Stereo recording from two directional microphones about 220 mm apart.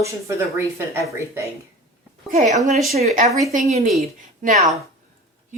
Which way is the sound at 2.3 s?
35° right (ahead or behind).